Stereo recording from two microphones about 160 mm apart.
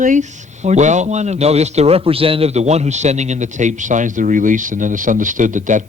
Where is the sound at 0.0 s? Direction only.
50° right (ahead or behind).